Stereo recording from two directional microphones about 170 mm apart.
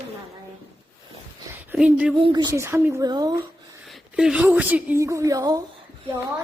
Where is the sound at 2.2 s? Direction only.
25° right (ahead or behind).